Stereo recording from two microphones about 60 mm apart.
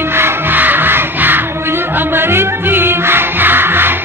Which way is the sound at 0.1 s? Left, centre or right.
Right.